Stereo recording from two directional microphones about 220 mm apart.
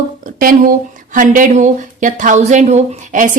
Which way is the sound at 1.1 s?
35° right (ahead or behind).